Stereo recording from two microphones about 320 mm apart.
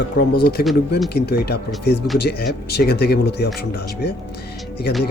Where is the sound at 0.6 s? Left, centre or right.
Left.